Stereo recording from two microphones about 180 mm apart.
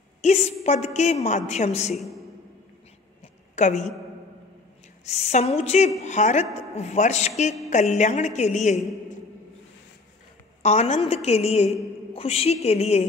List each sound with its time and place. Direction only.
0.2 s a woman's voice: 40° left (ahead or behind)
2.0 s speech: centre (ahead or behind)
3.5 s a woman's voice: 40° left (ahead or behind)
5.0 s a woman's voice: 35° left (ahead or behind)
10.6 s a woman's voice: 35° left (ahead or behind)